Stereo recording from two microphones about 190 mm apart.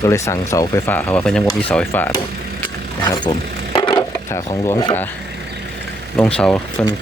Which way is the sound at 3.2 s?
25° left (ahead or behind).